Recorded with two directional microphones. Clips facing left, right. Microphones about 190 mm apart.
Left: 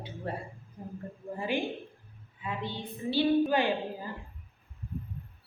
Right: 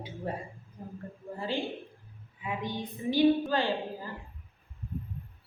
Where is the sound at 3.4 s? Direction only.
15° left (ahead or behind).